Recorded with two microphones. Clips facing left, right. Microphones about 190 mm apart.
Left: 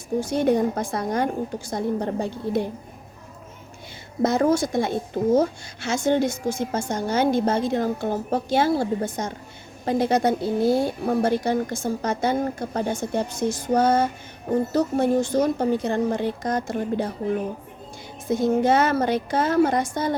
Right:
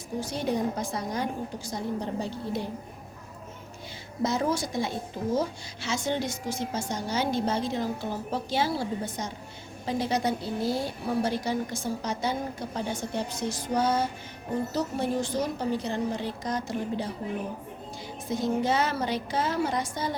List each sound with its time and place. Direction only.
0.2 s a woman's voice: 50° left (ahead or behind)
4.2 s a woman's voice: 50° left (ahead or behind)
18.3 s a woman's voice: 50° left (ahead or behind)